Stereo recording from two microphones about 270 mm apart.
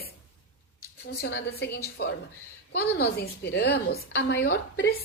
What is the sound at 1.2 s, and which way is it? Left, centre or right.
A woman's voice, left.